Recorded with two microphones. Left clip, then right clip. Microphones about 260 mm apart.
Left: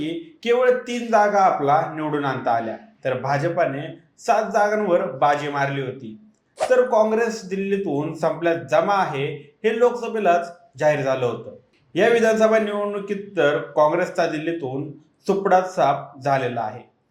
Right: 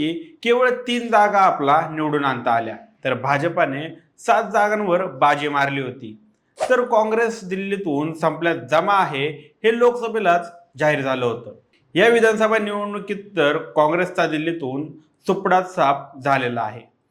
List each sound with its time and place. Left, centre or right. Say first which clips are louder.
0.0 s speech: right 4 dB; right